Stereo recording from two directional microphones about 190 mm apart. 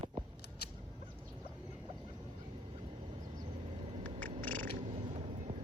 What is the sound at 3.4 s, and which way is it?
Vehicle, 30° right (ahead or behind).